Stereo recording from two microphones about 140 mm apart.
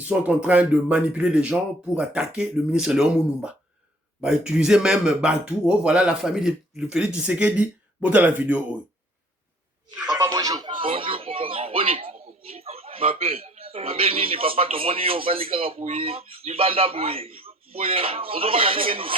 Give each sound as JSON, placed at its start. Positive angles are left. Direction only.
{"t": 0.0, "sound": "speech", "side_deg": -10}
{"t": 10.1, "sound": "speech", "side_deg": -25}